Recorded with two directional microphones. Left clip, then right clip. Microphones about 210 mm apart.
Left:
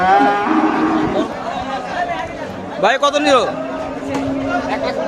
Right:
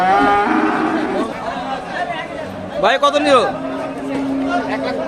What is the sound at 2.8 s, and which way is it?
Speech, 5° left (ahead or behind).